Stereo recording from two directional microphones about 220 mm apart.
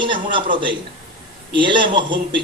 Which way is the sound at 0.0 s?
20° right (ahead or behind).